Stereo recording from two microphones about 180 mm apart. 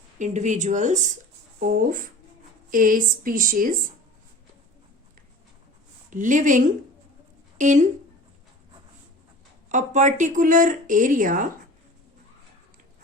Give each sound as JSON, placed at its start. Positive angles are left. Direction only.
{"t": 0.2, "sound": "speech", "side_deg": -40}
{"t": 6.1, "sound": "speech", "side_deg": -45}
{"t": 9.6, "sound": "speech", "side_deg": -45}